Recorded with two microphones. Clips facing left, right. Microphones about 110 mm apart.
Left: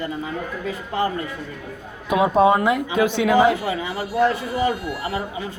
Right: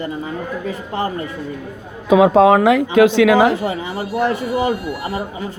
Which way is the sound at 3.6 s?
30° right (ahead or behind).